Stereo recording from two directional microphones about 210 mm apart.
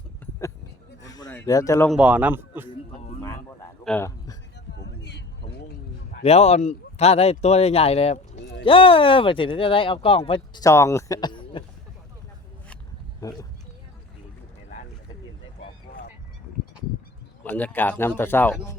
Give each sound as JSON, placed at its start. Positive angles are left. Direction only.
{"t": 1.0, "sound": "a sound", "side_deg": 20}
{"t": 1.3, "sound": "speech", "side_deg": 15}
{"t": 1.9, "sound": "speech", "side_deg": -5}
{"t": 3.8, "sound": "a man's voice", "side_deg": 10}
{"t": 4.7, "sound": "a sound", "side_deg": 55}
{"t": 6.2, "sound": "speech", "side_deg": 30}
{"t": 17.4, "sound": "speech", "side_deg": 5}